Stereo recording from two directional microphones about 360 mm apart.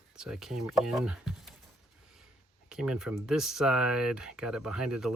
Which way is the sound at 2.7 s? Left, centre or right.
Centre.